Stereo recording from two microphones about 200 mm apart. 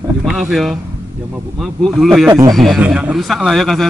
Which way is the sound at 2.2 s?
15° right (ahead or behind).